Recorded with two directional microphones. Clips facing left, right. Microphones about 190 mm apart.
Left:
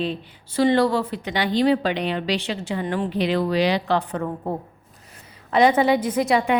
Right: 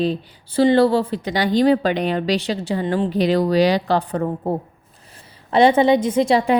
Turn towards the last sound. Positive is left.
turn(degrees=-35)  # may be behind; listen again after turning